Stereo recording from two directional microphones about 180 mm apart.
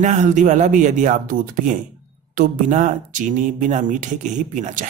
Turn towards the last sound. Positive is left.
turn(degrees=-45)  # may be behind; listen again after turning